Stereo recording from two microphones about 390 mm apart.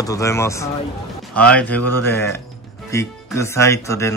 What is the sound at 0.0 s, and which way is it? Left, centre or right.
Speech, centre.